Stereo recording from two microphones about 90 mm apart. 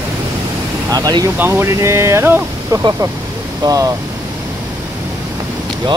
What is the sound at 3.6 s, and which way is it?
Speech, 40° right (ahead or behind).